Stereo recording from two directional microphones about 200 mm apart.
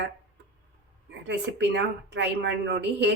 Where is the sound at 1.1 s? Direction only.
60° right (ahead or behind).